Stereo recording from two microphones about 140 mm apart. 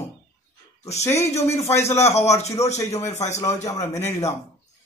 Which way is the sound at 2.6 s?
20° left (ahead or behind).